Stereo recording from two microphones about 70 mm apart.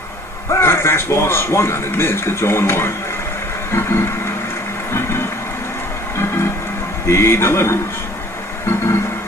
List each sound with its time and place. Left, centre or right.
0.5 s speech: left
6.1 s music: left
7.1 s speech: left